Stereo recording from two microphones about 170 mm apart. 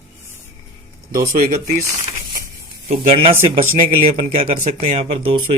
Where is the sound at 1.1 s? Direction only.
55° right (ahead or behind).